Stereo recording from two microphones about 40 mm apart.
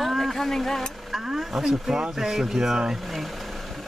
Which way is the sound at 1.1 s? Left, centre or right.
Centre.